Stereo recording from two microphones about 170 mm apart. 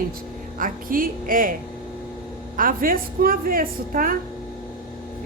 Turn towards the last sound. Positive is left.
turn(degrees=-55)  # may be behind; listen again after turning